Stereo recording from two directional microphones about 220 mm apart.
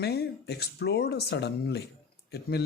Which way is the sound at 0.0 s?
50° left (ahead or behind).